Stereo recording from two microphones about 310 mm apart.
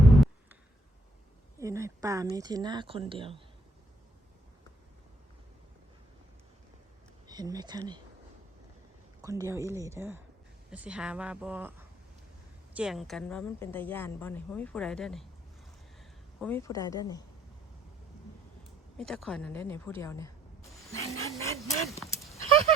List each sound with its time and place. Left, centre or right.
0.0 s a sound: centre
1.5 s a sound: centre
2.3 s speech: centre
7.3 s speech: centre
9.2 s a woman's voice: centre
12.7 s a woman's voice: centre
16.4 s speech: centre
18.9 s speech: centre
21.0 s vehicle: centre
21.8 s a sound: centre